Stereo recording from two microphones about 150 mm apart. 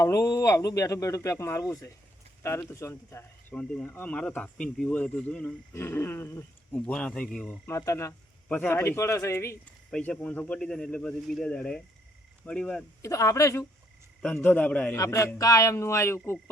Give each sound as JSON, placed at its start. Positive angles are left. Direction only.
{"t": 0.0, "sound": "speech", "side_deg": 20}
{"t": 5.7, "sound": "a man's voice", "side_deg": 15}
{"t": 7.7, "sound": "speech", "side_deg": 20}
{"t": 9.9, "sound": "speech", "side_deg": 5}
{"t": 13.0, "sound": "speech", "side_deg": 20}
{"t": 14.2, "sound": "speech", "side_deg": 5}
{"t": 14.9, "sound": "speech", "side_deg": 20}